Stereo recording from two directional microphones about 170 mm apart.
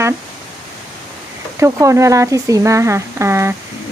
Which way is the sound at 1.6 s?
15° right (ahead or behind).